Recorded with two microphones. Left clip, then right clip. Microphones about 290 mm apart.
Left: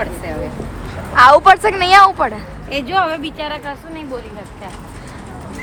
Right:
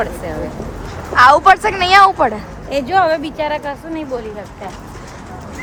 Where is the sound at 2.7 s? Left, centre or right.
Right.